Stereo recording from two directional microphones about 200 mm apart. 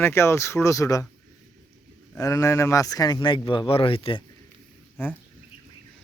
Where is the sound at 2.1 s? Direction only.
15° left (ahead or behind).